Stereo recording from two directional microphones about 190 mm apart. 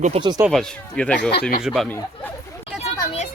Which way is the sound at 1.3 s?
50° left (ahead or behind).